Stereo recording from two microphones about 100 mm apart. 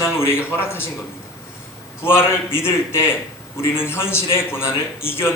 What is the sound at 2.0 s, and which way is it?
A man's voice, 25° left (ahead or behind).